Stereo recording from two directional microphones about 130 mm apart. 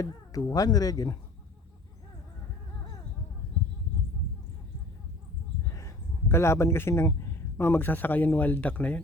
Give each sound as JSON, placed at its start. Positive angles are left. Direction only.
{"t": 0.0, "sound": "speech", "side_deg": 25}
{"t": 5.7, "sound": "speech", "side_deg": 20}